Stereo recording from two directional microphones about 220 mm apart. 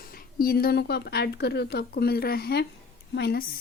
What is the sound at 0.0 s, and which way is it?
Speech, 40° left (ahead or behind).